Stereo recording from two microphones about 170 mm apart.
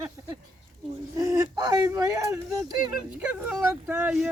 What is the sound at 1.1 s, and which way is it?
Speech, 20° right (ahead or behind).